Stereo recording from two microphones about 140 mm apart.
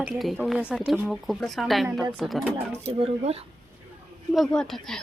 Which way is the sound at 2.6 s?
45° right (ahead or behind).